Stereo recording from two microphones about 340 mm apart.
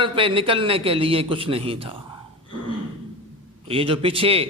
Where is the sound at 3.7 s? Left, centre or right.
Centre.